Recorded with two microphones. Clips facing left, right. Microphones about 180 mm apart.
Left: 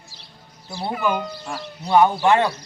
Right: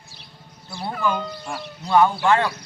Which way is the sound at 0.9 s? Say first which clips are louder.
Left 1 dB; 10° left (ahead or behind).